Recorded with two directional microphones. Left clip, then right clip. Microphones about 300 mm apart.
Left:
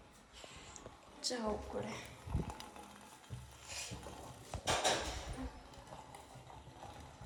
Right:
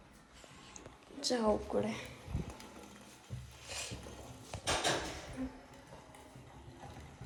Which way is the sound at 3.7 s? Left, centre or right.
Centre.